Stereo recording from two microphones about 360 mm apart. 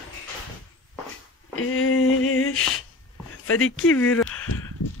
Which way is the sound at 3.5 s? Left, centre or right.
Left.